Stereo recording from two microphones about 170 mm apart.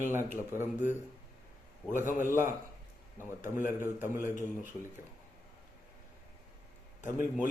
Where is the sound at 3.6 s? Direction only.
15° right (ahead or behind).